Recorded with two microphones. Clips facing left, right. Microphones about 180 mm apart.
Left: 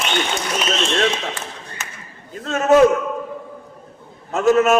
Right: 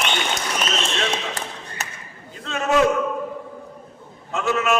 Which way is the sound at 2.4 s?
40° left (ahead or behind).